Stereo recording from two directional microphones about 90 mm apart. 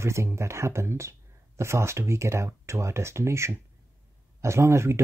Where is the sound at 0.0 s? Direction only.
30° right (ahead or behind).